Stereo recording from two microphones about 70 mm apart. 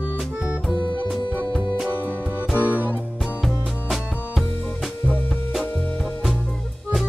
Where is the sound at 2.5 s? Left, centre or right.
Right.